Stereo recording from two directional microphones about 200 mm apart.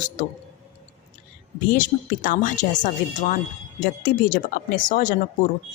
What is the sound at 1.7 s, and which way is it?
Speech, 40° left (ahead or behind).